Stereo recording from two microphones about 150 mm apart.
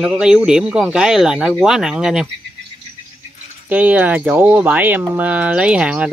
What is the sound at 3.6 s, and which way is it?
Speech, 10° right (ahead or behind).